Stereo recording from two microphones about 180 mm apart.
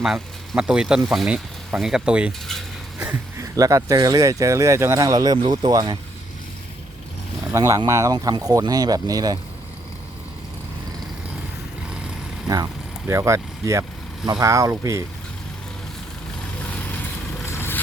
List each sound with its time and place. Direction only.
0.0 s speech: 5° right (ahead or behind); by 6.0 s 25° right (ahead or behind)
7.5 s speech: 15° right (ahead or behind)
13.1 s speech: 15° right (ahead or behind)
16.6 s vehicle: 10° left (ahead or behind)